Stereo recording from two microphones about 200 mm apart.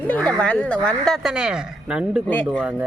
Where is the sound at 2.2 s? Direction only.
5° left (ahead or behind).